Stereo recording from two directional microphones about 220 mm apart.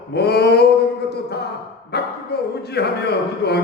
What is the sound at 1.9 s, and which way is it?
A man's voice, 45° left (ahead or behind).